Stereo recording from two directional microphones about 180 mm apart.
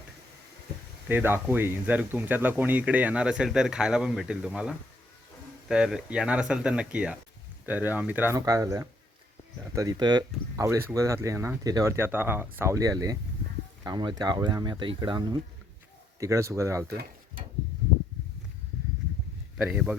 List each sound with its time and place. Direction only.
1.0 s speech: 10° right (ahead or behind)
19.5 s speech: 5° right (ahead or behind)